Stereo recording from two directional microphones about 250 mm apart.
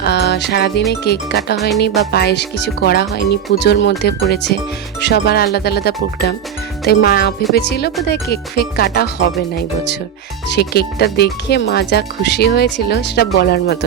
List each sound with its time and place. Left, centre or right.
0.0 s music: left
0.9 s speech: left
10.5 s speech: left